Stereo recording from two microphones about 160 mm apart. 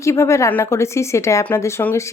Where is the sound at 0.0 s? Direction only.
20° left (ahead or behind).